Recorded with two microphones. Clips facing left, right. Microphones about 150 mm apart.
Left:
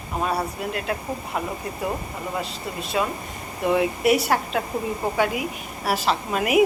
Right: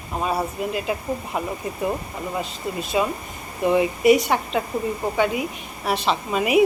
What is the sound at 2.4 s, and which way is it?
Speech, centre (ahead or behind).